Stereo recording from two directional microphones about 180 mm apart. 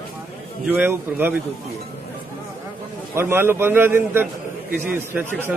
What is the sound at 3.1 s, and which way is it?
A man's voice, 15° right (ahead or behind).